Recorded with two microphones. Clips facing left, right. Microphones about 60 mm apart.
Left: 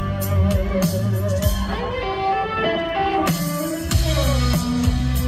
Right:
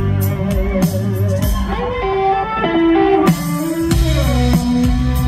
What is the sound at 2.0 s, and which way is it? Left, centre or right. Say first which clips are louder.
Music: right 6 dB; right.